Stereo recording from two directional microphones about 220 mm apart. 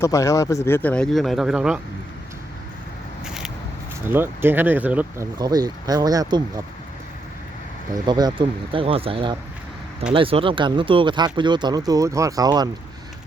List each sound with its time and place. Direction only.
0.0 s speech: 15° left (ahead or behind); by 1.8 s 5° right (ahead or behind)
3.2 s a sound: centre (ahead or behind)
4.1 s speech: 10° right (ahead or behind)
8.0 s speech: 20° right (ahead or behind)